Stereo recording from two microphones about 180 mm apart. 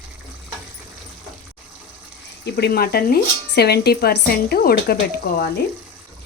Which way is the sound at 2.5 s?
65° left (ahead or behind).